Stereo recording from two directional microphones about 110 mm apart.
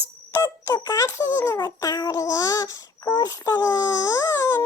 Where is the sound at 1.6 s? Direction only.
35° left (ahead or behind).